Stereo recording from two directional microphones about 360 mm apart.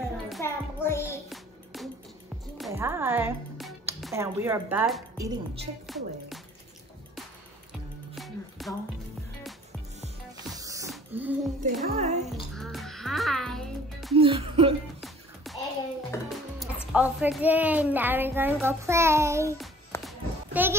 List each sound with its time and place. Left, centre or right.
0.3 s music: centre
2.5 s speech: centre
8.1 s music: centre
10.5 s music: centre
11.9 s speech: centre
12.5 s music: centre
14.1 s speech: centre
15.0 s music: centre
16.1 s speech: centre
19.9 s a sound: centre